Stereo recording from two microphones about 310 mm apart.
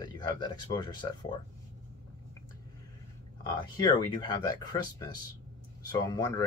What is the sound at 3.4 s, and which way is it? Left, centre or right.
Speech, centre.